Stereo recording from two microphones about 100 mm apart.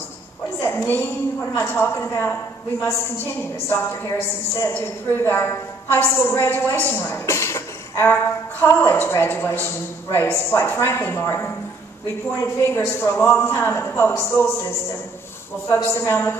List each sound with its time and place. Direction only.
0.6 s a sound: 25° left (ahead or behind)
1.7 s a woman's voice: 25° left (ahead or behind)
12.6 s a woman's voice: 20° left (ahead or behind)
15.7 s a woman's voice: 25° left (ahead or behind)